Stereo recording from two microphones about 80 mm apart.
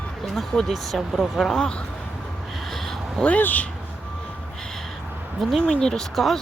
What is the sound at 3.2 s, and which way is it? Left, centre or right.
Speech, centre.